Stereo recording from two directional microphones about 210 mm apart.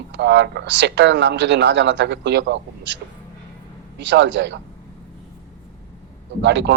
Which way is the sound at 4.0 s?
55° right (ahead or behind).